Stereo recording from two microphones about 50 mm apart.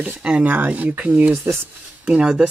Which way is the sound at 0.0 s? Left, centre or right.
Right.